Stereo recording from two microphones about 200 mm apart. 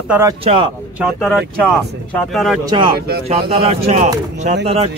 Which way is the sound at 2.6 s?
25° right (ahead or behind).